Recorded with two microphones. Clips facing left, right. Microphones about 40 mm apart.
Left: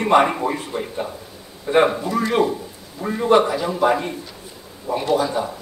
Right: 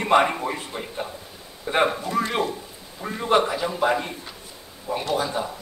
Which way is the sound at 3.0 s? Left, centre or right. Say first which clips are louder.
Left 5 dB; centre.